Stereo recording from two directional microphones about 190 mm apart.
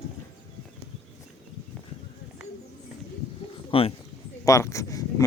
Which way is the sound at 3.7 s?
30° left (ahead or behind).